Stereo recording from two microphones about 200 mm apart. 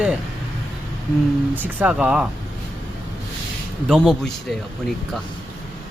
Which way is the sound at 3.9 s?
Centre (ahead or behind).